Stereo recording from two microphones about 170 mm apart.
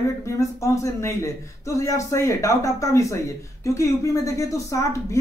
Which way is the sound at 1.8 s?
15° left (ahead or behind).